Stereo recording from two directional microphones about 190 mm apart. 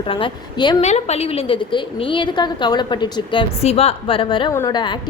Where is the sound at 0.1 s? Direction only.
25° left (ahead or behind).